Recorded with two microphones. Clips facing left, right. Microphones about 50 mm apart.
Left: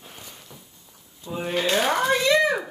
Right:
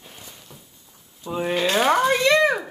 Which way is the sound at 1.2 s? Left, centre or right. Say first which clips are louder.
Right 4 dB; right.